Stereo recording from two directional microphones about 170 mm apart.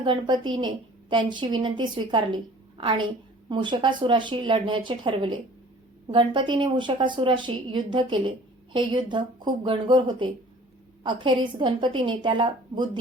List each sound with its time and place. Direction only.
0.0 s speech: 25° right (ahead or behind)